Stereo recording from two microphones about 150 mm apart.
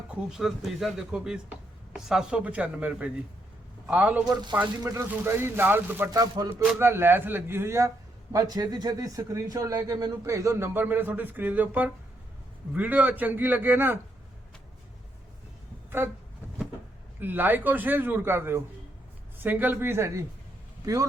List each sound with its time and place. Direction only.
0.1 s a man's voice: 5° right (ahead or behind)
4.3 s a man's voice: 25° right (ahead or behind)
4.5 s a man's voice: 10° right (ahead or behind)
6.1 s a man's voice: 25° right (ahead or behind)
16.0 s a man's voice: 15° right (ahead or behind)
17.2 s a man's voice: 10° right (ahead or behind)